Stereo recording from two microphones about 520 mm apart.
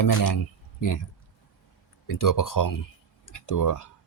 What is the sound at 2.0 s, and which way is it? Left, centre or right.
Speech, left.